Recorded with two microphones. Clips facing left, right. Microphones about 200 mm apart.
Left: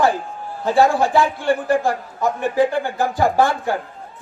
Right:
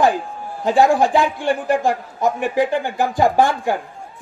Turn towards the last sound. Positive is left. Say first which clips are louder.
# right 1 dB
turn(degrees=-15)  # may be behind; listen again after turning